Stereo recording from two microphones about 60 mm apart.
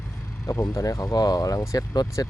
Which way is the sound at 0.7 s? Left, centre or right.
Left.